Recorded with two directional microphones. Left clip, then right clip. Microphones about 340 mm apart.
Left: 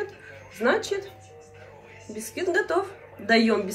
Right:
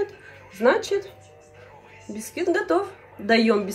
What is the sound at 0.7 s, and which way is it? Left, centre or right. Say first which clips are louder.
Speech: right 4 dB; centre.